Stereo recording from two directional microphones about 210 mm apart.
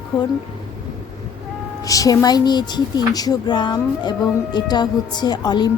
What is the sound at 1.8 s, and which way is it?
Speech, 15° left (ahead or behind).